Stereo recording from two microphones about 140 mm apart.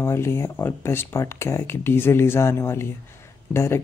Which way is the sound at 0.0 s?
20° left (ahead or behind).